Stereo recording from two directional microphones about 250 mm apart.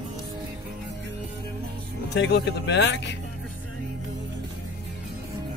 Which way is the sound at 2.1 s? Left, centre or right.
Left.